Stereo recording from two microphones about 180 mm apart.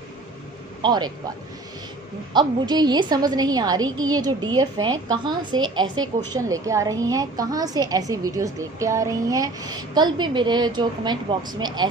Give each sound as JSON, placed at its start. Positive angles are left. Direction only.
{"t": 0.8, "sound": "a woman's voice", "side_deg": -25}
{"t": 2.3, "sound": "a woman's voice", "side_deg": -25}